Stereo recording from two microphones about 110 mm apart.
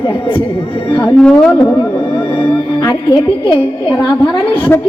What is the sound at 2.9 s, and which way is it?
A woman's voice, 35° left (ahead or behind).